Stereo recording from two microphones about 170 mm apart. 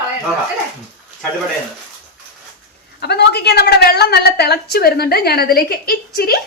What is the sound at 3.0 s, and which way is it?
A woman's voice, 75° left (ahead or behind).